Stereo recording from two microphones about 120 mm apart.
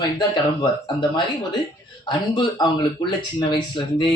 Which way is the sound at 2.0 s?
40° left (ahead or behind).